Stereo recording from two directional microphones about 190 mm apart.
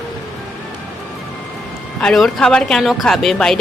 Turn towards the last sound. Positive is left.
turn(degrees=0)  # may be behind; listen again after turning